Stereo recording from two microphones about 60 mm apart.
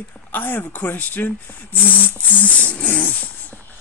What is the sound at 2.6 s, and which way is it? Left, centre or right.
Music, left.